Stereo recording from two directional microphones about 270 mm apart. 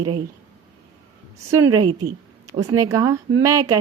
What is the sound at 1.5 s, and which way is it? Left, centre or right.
Speech, centre.